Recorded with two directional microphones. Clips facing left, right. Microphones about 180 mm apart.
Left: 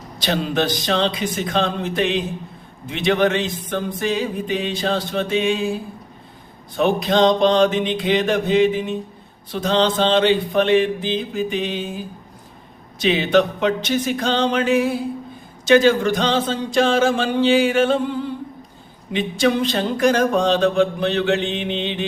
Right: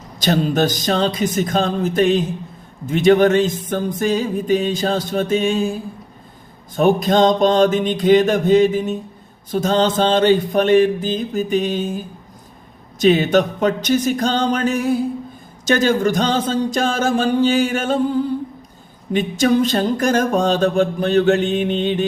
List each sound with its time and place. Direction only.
0.2 s speech: 45° right (ahead or behind)
6.7 s speech: 45° right (ahead or behind)
13.0 s speech: 45° right (ahead or behind)